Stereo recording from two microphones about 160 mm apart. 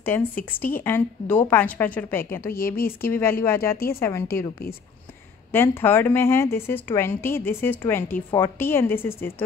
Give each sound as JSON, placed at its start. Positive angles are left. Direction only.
{"t": 0.0, "sound": "a woman's voice", "side_deg": 10}
{"t": 3.7, "sound": "a woman's voice", "side_deg": 70}
{"t": 5.5, "sound": "a woman's voice", "side_deg": 15}